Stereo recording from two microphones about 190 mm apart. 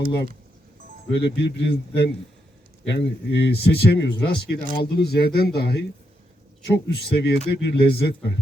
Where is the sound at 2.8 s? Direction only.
65° left (ahead or behind).